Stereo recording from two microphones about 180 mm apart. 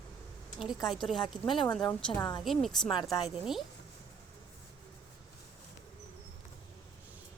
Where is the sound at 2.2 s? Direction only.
25° left (ahead or behind).